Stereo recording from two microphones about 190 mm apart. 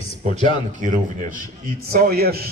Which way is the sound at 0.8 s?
40° right (ahead or behind).